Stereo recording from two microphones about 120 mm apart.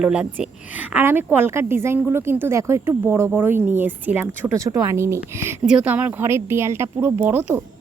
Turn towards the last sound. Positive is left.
turn(degrees=-15)  # may be behind; listen again after turning